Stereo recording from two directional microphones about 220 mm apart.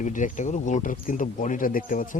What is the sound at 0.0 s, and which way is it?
Speech, 35° left (ahead or behind).